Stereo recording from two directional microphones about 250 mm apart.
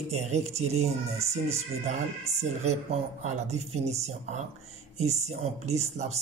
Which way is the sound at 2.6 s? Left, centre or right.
Right.